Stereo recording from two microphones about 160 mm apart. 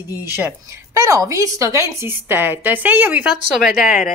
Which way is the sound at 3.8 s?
60° left (ahead or behind).